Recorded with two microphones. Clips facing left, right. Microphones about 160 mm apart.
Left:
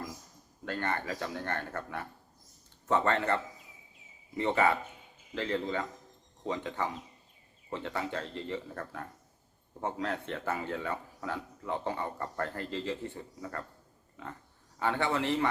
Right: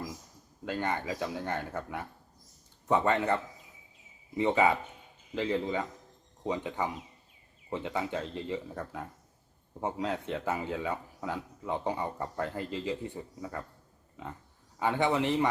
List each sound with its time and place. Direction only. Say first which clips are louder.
0.6 s a man's voice: right 2 dB; 15° right (ahead or behind)
14.8 s a man's voice: right 3 dB; 15° right (ahead or behind)